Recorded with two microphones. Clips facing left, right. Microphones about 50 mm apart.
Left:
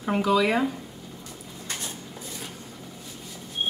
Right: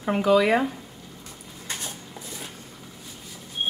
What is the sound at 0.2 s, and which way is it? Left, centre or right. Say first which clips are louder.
Speech: right 4 dB; right.